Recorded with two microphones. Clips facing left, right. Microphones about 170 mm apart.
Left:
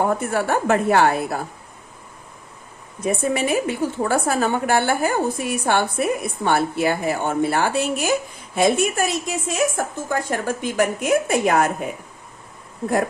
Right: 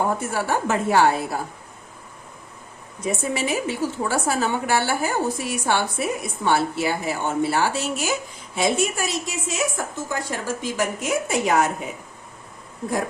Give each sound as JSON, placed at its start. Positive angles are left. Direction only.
{"t": 0.2, "sound": "a woman's voice", "side_deg": 55}
{"t": 3.0, "sound": "a woman's voice", "side_deg": 55}